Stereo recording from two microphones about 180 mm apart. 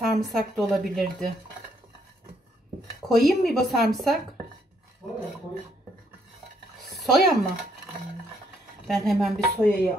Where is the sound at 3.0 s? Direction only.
Centre (ahead or behind).